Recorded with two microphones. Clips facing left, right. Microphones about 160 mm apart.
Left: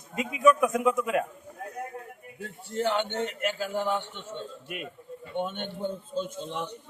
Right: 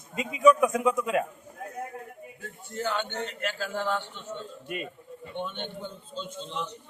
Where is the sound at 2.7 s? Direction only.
25° left (ahead or behind).